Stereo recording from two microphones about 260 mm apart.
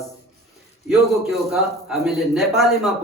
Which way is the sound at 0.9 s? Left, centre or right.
Centre.